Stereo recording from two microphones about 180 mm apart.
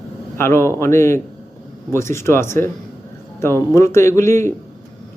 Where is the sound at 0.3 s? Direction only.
15° left (ahead or behind).